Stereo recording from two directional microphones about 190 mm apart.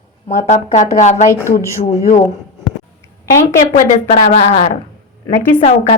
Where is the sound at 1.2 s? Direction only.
15° left (ahead or behind).